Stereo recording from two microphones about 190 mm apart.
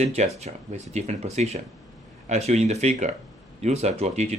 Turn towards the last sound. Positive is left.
turn(degrees=-35)  # may be behind; listen again after turning